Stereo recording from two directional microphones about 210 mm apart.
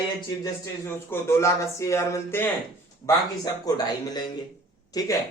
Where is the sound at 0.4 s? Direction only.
10° left (ahead or behind).